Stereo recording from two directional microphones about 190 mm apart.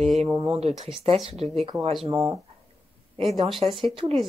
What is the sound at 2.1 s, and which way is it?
Speech, 20° right (ahead or behind).